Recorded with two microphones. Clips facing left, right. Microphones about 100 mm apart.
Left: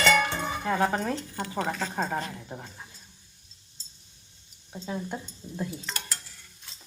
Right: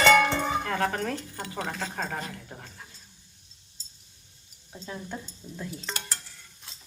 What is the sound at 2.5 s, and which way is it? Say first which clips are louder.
Speech: left 4 dB; 15° left (ahead or behind).